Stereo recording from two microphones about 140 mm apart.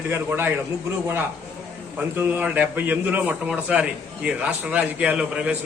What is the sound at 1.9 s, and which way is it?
A man's voice, 15° right (ahead or behind).